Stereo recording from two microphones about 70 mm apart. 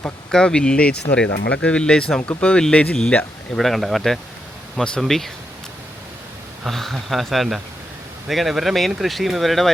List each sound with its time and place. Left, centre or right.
0.3 s speech: centre
3.6 s speech: centre
6.7 s speech: centre